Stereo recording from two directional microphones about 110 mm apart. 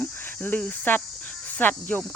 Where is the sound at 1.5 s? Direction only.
15° left (ahead or behind).